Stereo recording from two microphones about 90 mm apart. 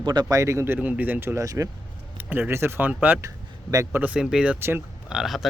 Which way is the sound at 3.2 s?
40° right (ahead or behind).